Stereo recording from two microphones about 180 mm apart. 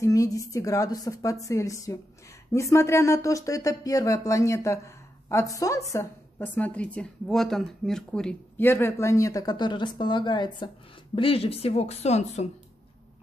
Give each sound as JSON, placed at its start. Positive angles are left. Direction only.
{"t": 0.0, "sound": "a woman's voice", "side_deg": 20}